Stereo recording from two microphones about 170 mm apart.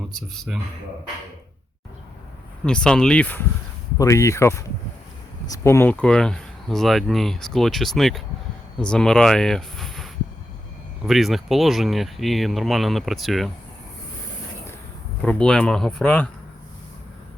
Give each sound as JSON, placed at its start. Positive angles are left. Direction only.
{"t": 0.1, "sound": "speech", "side_deg": 0}
{"t": 2.6, "sound": "speech", "side_deg": 5}
{"t": 15.2, "sound": "speech", "side_deg": 5}